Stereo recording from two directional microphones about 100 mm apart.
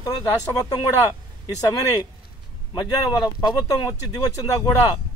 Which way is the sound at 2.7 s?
45° left (ahead or behind).